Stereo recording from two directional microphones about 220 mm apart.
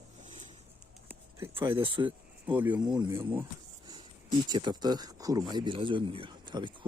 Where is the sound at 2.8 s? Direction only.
20° right (ahead or behind).